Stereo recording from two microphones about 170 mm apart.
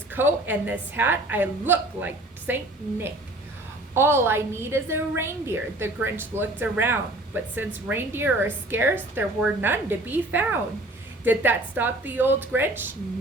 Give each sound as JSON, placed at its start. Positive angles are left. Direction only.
{"t": 0.1, "sound": "a woman's voice", "side_deg": -10}
{"t": 3.9, "sound": "a woman's voice", "side_deg": -15}